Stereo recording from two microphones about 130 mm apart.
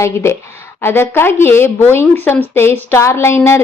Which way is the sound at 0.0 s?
20° left (ahead or behind).